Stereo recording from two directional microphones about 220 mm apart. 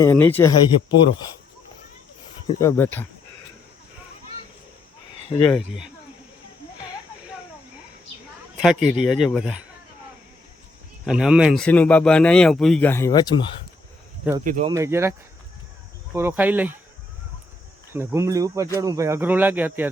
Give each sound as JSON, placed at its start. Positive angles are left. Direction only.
{"t": 0.0, "sound": "speech", "side_deg": 10}
{"t": 2.5, "sound": "speech", "side_deg": 15}
{"t": 5.3, "sound": "speech", "side_deg": 20}
{"t": 8.6, "sound": "a man's voice", "side_deg": 0}
{"t": 11.0, "sound": "a man's voice", "side_deg": -5}
{"t": 14.4, "sound": "speech", "side_deg": -35}
{"t": 14.7, "sound": "speech", "side_deg": -10}
{"t": 16.1, "sound": "speech", "side_deg": -10}
{"t": 17.9, "sound": "speech", "side_deg": -10}